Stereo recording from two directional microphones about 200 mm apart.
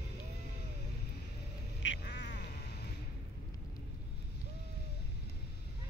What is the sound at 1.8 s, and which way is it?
Quack, 65° left (ahead or behind).